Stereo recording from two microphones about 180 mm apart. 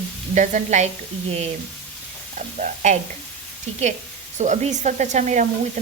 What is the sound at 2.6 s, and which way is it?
Speech, 45° right (ahead or behind).